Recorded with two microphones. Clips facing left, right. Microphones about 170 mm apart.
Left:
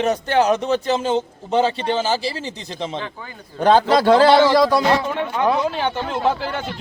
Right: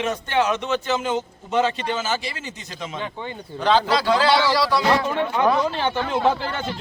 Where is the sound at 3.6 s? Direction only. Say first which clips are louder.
Left 5 dB; 50° left (ahead or behind).